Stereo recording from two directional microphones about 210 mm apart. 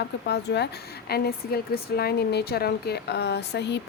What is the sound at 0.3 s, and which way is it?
Speech, 55° left (ahead or behind).